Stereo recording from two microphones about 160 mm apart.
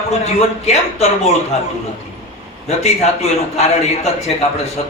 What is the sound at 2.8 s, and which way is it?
A man's voice, 45° left (ahead or behind).